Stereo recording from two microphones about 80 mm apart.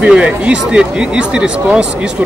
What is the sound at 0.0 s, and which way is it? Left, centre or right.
Speech, centre.